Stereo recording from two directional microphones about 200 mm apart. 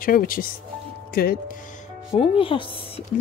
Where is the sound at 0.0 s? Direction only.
45° left (ahead or behind).